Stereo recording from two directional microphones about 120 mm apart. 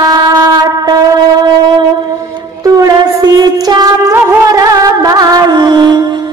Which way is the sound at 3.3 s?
35° right (ahead or behind).